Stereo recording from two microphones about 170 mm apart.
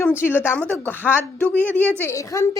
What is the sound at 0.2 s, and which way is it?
Speech, 15° left (ahead or behind).